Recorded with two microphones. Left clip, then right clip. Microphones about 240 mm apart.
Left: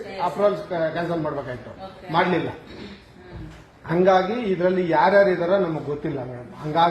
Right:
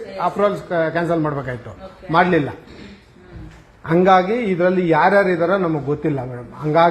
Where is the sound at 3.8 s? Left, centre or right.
Right.